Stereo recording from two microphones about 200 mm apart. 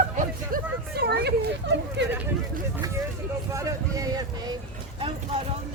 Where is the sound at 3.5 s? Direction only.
15° right (ahead or behind).